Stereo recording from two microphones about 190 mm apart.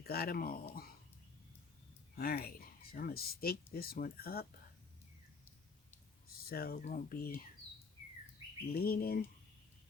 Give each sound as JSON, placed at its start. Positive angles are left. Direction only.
{"t": 0.0, "sound": "speech", "side_deg": 55}
{"t": 2.1, "sound": "speech", "side_deg": 50}
{"t": 6.5, "sound": "speech", "side_deg": 50}
{"t": 8.7, "sound": "speech", "side_deg": 50}